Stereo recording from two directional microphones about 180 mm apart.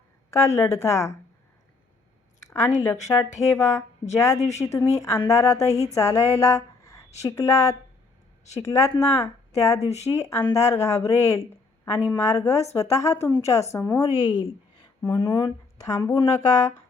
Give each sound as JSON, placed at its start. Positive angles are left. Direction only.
{"t": 0.3, "sound": "speech", "side_deg": 15}
{"t": 2.9, "sound": "speech", "side_deg": 15}
{"t": 4.4, "sound": "speech", "side_deg": 35}
{"t": 4.7, "sound": "a woman's voice", "side_deg": 15}